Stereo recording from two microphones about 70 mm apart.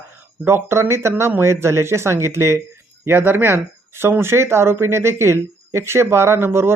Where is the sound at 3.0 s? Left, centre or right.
Right.